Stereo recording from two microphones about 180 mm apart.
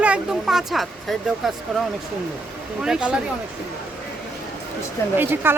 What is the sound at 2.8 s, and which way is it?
Speech, 5° right (ahead or behind).